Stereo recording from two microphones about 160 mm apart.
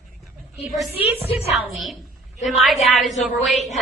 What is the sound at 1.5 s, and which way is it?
A woman's voice, centre (ahead or behind).